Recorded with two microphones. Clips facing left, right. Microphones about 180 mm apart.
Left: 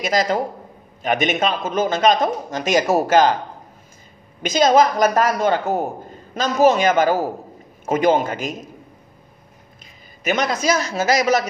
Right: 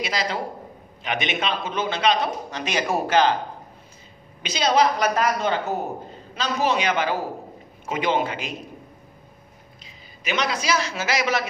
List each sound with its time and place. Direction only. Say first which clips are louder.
0.0 s speech: left 7 dB; 45° left (ahead or behind)
4.4 s speech: left 6 dB; 45° left (ahead or behind)
9.8 s a man's voice: left 7 dB; 45° left (ahead or behind)